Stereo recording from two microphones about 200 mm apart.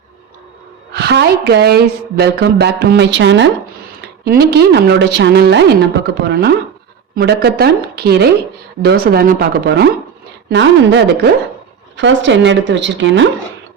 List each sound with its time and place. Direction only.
0.9 s a woman's voice: 55° right (ahead or behind)